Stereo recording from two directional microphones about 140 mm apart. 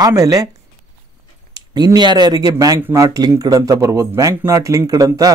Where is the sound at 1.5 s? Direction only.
30° right (ahead or behind).